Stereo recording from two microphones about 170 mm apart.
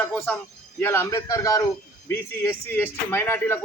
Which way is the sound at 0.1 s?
10° left (ahead or behind).